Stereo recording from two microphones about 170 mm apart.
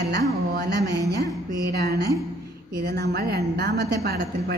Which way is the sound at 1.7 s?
70° right (ahead or behind).